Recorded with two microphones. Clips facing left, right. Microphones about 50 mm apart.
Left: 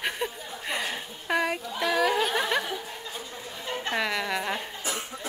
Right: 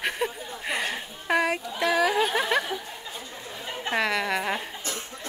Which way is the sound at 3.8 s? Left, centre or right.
Centre.